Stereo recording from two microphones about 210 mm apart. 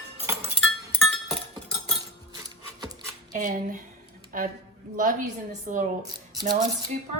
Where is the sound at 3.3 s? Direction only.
40° right (ahead or behind).